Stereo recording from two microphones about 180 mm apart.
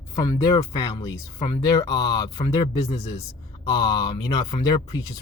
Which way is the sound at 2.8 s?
35° left (ahead or behind).